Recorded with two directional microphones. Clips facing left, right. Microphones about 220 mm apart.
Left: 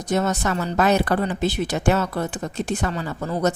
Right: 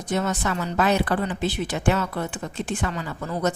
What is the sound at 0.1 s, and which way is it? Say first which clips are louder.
A woman's voice: left 3 dB; 40° left (ahead or behind).